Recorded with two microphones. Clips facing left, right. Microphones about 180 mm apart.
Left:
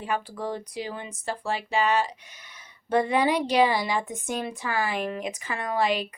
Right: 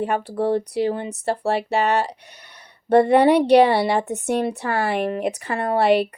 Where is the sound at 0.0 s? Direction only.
65° right (ahead or behind).